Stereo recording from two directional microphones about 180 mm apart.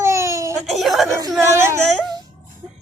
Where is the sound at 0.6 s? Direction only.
Centre (ahead or behind).